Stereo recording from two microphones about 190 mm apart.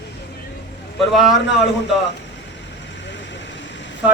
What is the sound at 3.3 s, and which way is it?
Vehicle, 70° left (ahead or behind).